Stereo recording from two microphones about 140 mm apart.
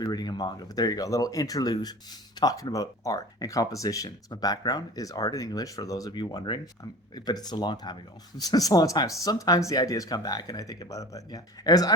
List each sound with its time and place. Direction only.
0.0 s speech: 30° left (ahead or behind)